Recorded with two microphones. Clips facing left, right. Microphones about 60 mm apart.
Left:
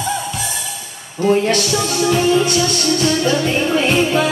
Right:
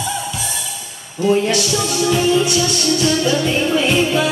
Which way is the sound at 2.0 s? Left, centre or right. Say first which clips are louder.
Left 1 dB; left.